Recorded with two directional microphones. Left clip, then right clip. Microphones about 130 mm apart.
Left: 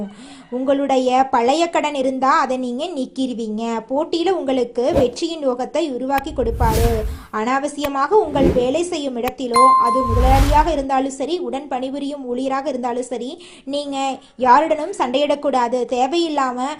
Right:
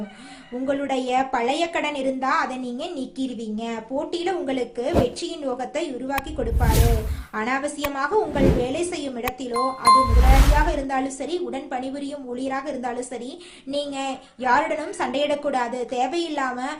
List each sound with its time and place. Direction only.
0.7 s a woman's voice: 40° left (ahead or behind)
7.3 s a woman's voice: 35° left (ahead or behind)
8.4 s speech: centre (ahead or behind)
8.6 s a woman's voice: 35° left (ahead or behind)
9.5 s speech: centre (ahead or behind)
10.7 s a woman's voice: 35° left (ahead or behind)